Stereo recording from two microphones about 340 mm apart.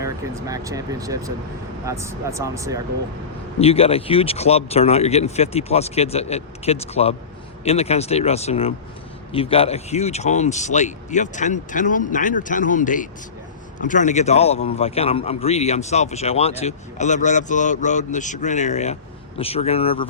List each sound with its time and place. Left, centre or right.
0.0 s speech: centre
3.6 s a man's voice: centre